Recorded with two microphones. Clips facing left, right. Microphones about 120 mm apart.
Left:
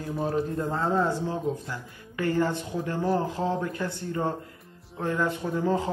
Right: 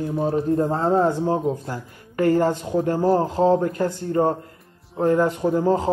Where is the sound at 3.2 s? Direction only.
40° right (ahead or behind).